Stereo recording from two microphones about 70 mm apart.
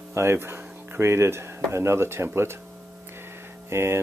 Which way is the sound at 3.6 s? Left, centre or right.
Right.